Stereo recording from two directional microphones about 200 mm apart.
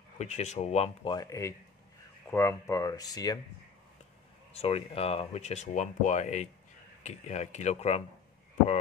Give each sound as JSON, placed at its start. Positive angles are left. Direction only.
{"t": 0.2, "sound": "speech", "side_deg": 35}
{"t": 4.6, "sound": "speech", "side_deg": 30}